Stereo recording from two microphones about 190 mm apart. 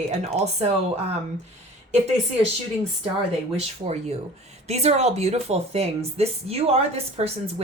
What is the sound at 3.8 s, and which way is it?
Speech, 25° right (ahead or behind).